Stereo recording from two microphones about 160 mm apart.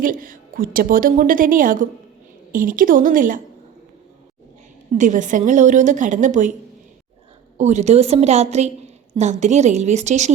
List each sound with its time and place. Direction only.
0.0 s a woman's voice: 60° right (ahead or behind)
4.9 s a woman's voice: 55° right (ahead or behind)
7.6 s a woman's voice: 45° right (ahead or behind)